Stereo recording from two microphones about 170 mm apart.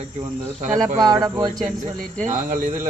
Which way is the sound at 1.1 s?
25° right (ahead or behind).